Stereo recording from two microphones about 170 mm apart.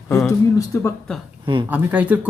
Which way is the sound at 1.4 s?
30° right (ahead or behind).